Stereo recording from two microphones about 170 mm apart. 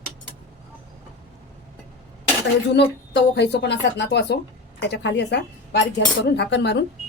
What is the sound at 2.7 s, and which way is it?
Speech, 90° left.